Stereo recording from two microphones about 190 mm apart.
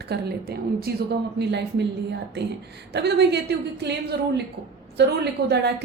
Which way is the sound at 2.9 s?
60° right (ahead or behind).